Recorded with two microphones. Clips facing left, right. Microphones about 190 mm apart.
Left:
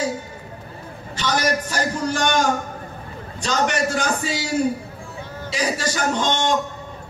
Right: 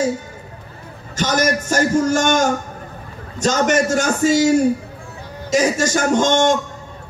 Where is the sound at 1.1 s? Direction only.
45° right (ahead or behind).